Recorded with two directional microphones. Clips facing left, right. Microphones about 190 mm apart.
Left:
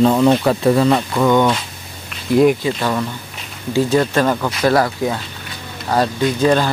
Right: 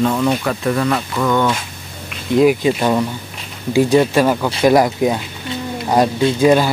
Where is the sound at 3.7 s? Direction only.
15° right (ahead or behind).